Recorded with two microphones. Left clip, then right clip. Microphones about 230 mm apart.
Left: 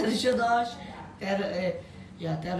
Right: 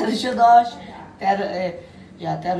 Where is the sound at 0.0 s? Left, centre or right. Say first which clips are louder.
Right 9 dB; centre.